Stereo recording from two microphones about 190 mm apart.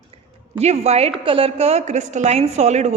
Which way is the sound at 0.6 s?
35° right (ahead or behind).